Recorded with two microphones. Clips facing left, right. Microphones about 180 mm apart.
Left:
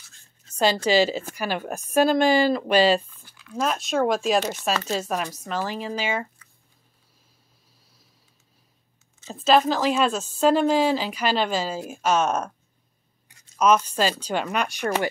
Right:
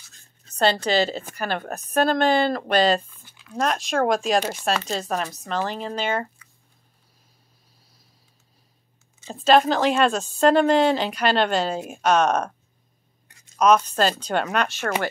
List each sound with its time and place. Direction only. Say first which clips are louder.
0.5 s a woman's voice: even; 10° left (ahead or behind)
3.3 s a sound: even; 25° right (ahead or behind)
3.5 s a woman's voice: right 1 dB; centre (ahead or behind)
9.3 s a woman's voice: right 2 dB; centre (ahead or behind)
13.6 s a woman's voice: right 2 dB; 5° left (ahead or behind)